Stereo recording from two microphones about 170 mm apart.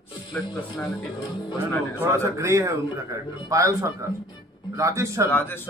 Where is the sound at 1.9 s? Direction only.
15° right (ahead or behind).